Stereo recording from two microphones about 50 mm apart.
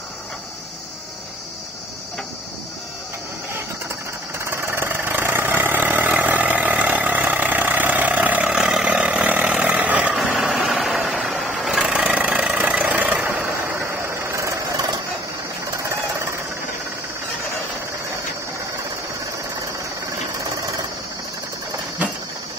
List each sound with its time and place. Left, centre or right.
4.5 s vehicle: right
10.2 s a sound: right
10.8 s vehicle: centre
11.8 s vehicle: right
13.7 s vehicle: right
15.6 s a sound: right